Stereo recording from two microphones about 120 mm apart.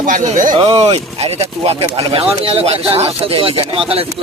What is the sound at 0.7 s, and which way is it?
Speech, 55° right (ahead or behind).